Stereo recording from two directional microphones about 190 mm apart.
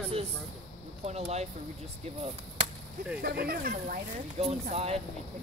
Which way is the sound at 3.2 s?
55° right (ahead or behind).